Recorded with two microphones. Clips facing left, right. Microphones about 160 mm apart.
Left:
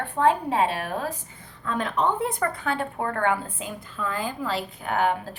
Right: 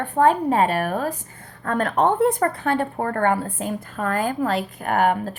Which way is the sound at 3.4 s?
55° right (ahead or behind).